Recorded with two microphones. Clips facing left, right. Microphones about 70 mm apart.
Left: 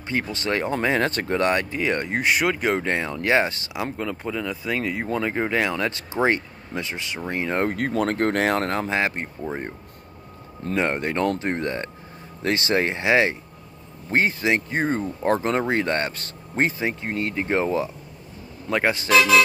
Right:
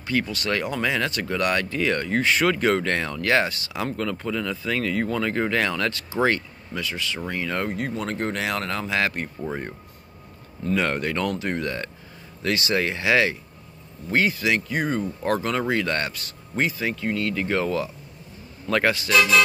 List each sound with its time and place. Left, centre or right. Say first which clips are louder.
0.0 s speech: right 1 dB; left
3.7 s speech: right 1 dB; centre
7.6 s speech: left 5 dB; left
18.7 s speech: right 1 dB; centre
18.9 s speech: left 2 dB; left